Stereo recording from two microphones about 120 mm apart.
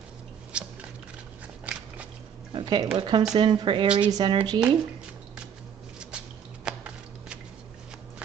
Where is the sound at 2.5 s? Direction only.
40° right (ahead or behind).